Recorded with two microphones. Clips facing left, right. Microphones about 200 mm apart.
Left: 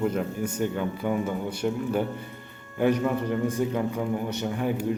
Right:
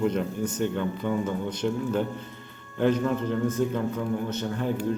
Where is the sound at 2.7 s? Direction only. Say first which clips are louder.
Even; 10° left (ahead or behind).